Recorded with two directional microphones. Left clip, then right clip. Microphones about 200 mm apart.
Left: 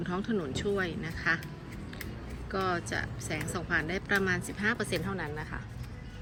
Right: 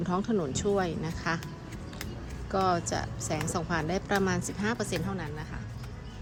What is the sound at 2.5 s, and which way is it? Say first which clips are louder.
A woman's voice: right 4 dB; 20° right (ahead or behind).